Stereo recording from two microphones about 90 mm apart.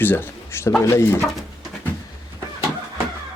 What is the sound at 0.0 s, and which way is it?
Speech, 25° left (ahead or behind).